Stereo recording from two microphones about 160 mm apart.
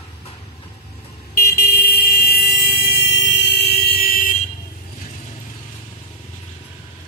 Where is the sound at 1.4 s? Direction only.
75° left (ahead or behind).